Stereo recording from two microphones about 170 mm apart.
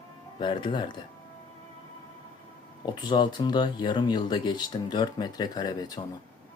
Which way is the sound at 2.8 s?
25° left (ahead or behind).